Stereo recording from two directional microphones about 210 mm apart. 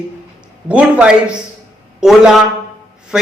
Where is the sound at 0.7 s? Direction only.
5° right (ahead or behind).